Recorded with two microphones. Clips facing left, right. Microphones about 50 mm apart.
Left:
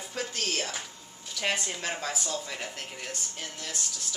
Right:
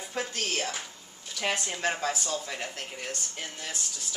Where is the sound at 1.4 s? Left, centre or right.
Centre.